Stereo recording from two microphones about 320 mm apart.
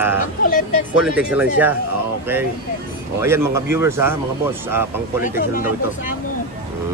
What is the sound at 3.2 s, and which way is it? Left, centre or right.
Speech, centre.